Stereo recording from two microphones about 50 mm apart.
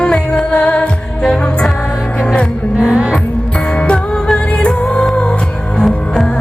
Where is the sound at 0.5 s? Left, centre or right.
Left.